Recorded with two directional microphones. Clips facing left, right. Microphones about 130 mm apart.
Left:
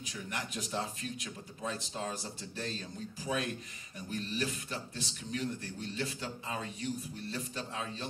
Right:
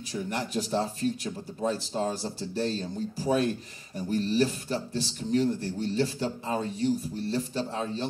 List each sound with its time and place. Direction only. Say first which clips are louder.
0.1 s speech: right 11 dB; 35° right (ahead or behind)